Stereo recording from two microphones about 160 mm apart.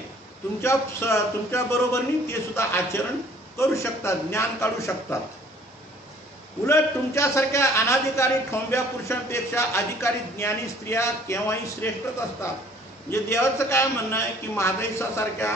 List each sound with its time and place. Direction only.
0.6 s a man's voice: 15° left (ahead or behind)
6.6 s a man's voice: 15° left (ahead or behind)
13.1 s a man's voice: 15° left (ahead or behind)